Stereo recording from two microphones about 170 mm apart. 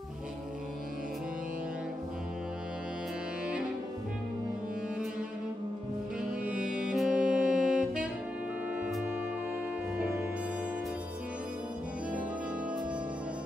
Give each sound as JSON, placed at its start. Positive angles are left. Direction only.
{"t": 6.4, "sound": "saxophone", "side_deg": -5}
{"t": 9.9, "sound": "music", "side_deg": -5}